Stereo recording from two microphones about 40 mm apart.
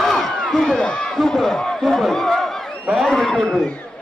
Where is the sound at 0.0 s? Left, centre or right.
Centre.